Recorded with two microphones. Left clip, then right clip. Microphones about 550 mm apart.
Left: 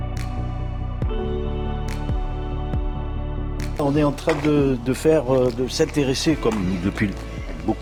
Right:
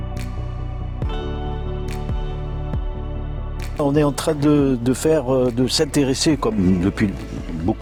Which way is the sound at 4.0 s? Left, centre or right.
Right.